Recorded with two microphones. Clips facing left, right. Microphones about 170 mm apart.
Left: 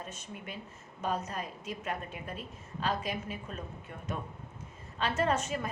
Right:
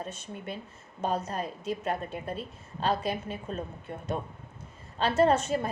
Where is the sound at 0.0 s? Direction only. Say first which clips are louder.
Right 5 dB; 30° right (ahead or behind).